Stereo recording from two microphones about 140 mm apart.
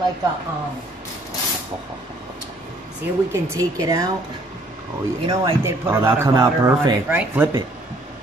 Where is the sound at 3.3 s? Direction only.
25° right (ahead or behind).